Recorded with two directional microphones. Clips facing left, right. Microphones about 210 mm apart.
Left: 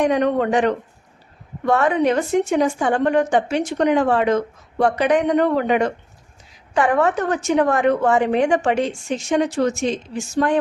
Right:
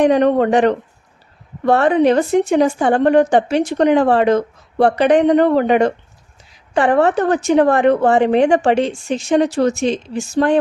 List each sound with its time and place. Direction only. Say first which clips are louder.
0.0 s a woman's voice: right 5 dB; 30° right (ahead or behind)